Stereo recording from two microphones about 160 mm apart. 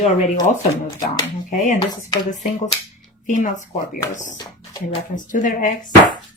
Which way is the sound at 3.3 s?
55° left (ahead or behind).